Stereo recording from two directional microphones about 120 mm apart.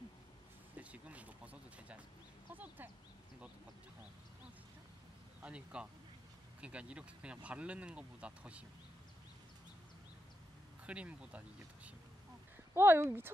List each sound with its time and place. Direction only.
0.7 s a sound: 10° right (ahead or behind)
5.4 s speech: 10° right (ahead or behind)
10.9 s speech: 10° right (ahead or behind)